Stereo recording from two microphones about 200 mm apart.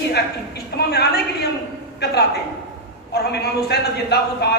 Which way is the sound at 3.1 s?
55° left (ahead or behind).